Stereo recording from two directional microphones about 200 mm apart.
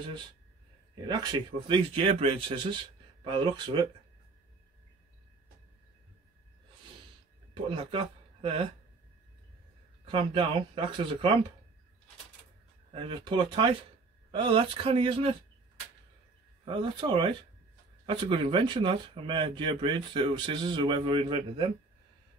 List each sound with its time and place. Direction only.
1.0 s speech: 20° right (ahead or behind)
7.7 s speech: 25° right (ahead or behind)
10.0 s speech: 25° right (ahead or behind)
12.9 s speech: 25° right (ahead or behind)
16.6 s speech: 25° right (ahead or behind)